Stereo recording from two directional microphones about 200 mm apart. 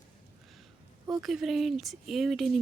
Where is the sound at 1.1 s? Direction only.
Centre (ahead or behind).